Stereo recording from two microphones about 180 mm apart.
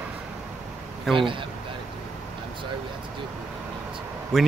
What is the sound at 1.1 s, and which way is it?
Speech, 25° right (ahead or behind).